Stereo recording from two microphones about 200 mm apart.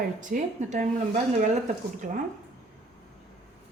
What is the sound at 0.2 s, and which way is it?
Speech, 40° right (ahead or behind).